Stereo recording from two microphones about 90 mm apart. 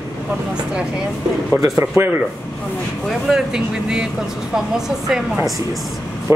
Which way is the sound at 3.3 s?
5° right (ahead or behind).